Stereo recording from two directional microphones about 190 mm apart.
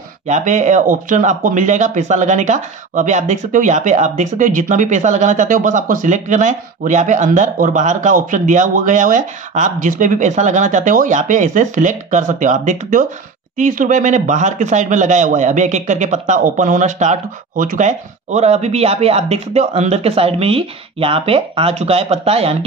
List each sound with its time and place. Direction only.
0.3 s speech: 40° right (ahead or behind)